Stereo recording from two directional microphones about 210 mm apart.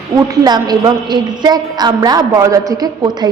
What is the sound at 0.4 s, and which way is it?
A woman's voice, 20° right (ahead or behind).